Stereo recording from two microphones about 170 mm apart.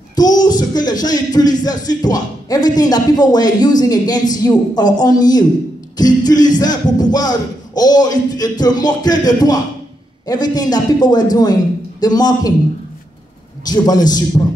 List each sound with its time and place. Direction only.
0.1 s speech: 25° left (ahead or behind)
13.7 s speech: 25° left (ahead or behind)